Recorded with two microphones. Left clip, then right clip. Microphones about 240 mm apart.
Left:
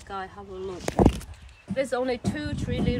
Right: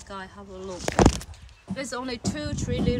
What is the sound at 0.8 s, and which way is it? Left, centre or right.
Speech, left.